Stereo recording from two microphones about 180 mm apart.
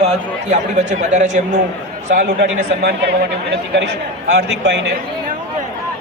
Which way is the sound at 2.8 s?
65° right (ahead or behind).